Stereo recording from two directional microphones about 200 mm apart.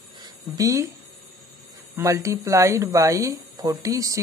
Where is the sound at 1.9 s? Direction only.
15° right (ahead or behind).